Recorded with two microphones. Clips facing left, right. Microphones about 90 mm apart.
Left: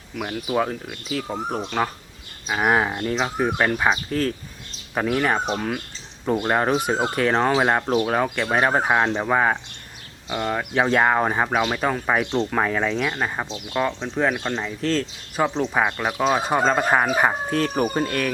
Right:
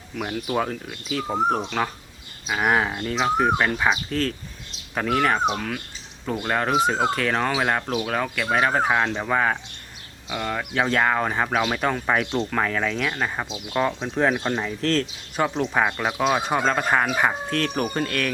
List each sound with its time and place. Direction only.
0.2 s speech: 5° left (ahead or behind); by 6.7 s 20° left (ahead or behind)
6.8 s speech: 10° left (ahead or behind)
7.3 s speech: 20° left (ahead or behind)
11.7 s speech: 5° left (ahead or behind)
13.5 s speech: 5° right (ahead or behind); by 18.3 s 10° left (ahead or behind)